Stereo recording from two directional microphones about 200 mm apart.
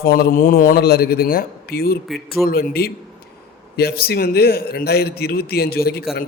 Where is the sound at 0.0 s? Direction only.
45° left (ahead or behind).